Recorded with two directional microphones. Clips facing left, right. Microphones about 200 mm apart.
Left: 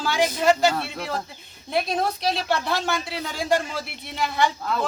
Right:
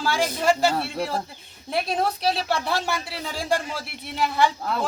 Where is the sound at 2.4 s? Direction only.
5° right (ahead or behind).